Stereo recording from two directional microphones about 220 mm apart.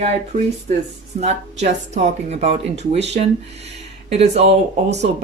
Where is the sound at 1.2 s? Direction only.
30° right (ahead or behind).